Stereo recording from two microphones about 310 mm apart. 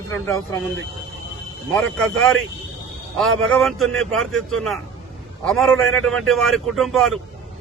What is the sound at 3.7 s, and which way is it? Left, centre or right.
Speech, right.